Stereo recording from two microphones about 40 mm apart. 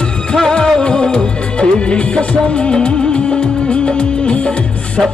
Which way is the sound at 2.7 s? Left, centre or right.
Left.